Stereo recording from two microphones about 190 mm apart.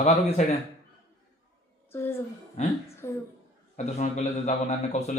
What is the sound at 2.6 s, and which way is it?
Speech, 40° left (ahead or behind).